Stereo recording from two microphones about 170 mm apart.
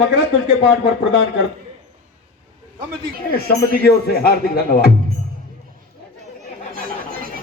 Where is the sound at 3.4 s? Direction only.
65° left (ahead or behind).